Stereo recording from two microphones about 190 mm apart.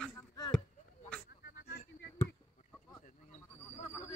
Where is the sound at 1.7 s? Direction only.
55° left (ahead or behind).